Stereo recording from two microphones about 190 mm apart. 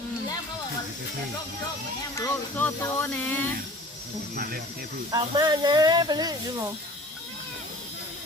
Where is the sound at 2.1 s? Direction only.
15° left (ahead or behind).